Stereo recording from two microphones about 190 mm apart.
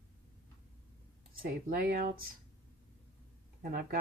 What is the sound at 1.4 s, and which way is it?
Speech, 55° right (ahead or behind).